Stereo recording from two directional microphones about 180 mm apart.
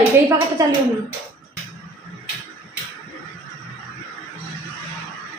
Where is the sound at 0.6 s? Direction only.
20° right (ahead or behind).